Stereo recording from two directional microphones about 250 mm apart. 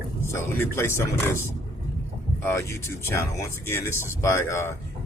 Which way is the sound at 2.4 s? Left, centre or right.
Centre.